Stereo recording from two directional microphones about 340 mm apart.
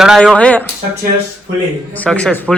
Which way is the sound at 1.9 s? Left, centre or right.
Centre.